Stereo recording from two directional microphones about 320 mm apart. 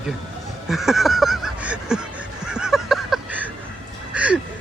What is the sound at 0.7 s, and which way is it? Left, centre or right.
Honk, centre.